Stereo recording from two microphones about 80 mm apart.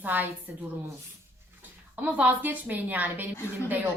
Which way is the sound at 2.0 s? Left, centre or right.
Centre.